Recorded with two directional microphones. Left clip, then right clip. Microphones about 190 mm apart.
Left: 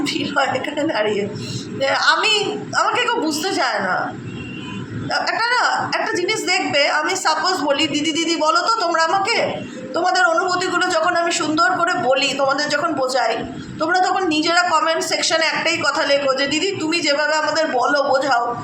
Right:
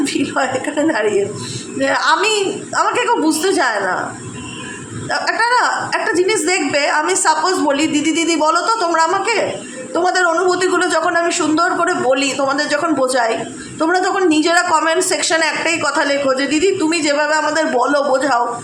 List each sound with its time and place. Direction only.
0.0 s a woman's voice: 45° right (ahead or behind)
5.0 s a woman's voice: 50° right (ahead or behind)